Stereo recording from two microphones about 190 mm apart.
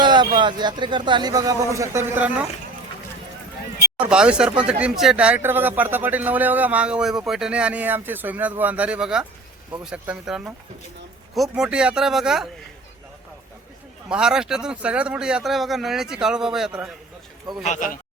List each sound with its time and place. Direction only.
0.0 s speech: 25° right (ahead or behind)
3.9 s speech: 5° right (ahead or behind)
14.1 s speech: 5° right (ahead or behind)
17.6 s speech: 40° left (ahead or behind)